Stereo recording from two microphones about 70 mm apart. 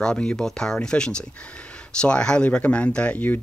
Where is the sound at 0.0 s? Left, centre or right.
Centre.